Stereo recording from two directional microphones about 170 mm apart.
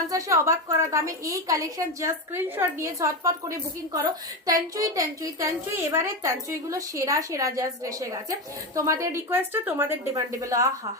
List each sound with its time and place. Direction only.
0.1 s a woman's voice: 20° right (ahead or behind)